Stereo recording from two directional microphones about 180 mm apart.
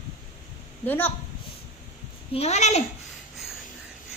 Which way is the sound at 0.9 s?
10° left (ahead or behind).